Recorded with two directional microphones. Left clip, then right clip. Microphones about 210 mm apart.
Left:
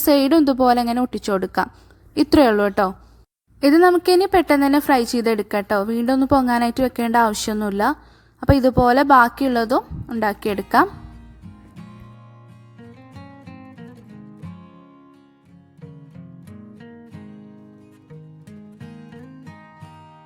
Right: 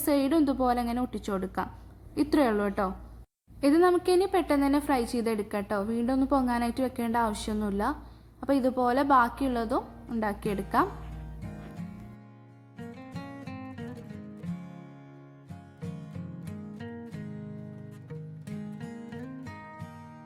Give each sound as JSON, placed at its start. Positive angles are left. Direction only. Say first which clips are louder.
{"t": 0.0, "sound": "a woman's voice", "louder": "left 10 dB", "side_deg": 45}
{"t": 12.7, "sound": "music", "louder": "right 1 dB", "side_deg": 0}
{"t": 16.4, "sound": "music", "louder": "left 1 dB", "side_deg": 0}